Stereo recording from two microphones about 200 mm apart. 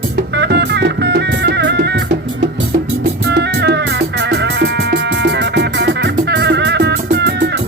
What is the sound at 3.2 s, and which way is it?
Music, 55° right (ahead or behind).